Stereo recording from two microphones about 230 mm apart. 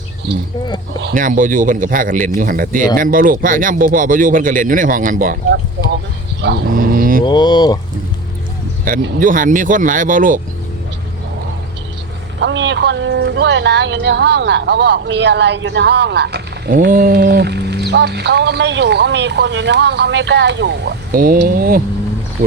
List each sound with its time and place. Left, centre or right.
1.0 s speech: right
6.4 s livestock: right
7.3 s speech: centre
8.8 s speech: right
12.4 s speech: right